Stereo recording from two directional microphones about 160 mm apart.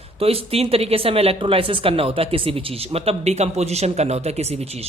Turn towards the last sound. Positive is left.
turn(degrees=-40)  # may be behind; listen again after turning